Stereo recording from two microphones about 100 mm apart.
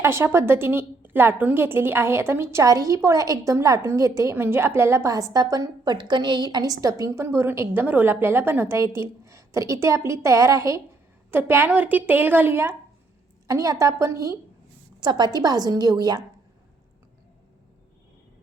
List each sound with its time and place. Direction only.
0.0 s a woman's voice: 25° right (ahead or behind)
13.5 s a woman's voice: 30° right (ahead or behind)
15.0 s a woman's voice: 45° right (ahead or behind)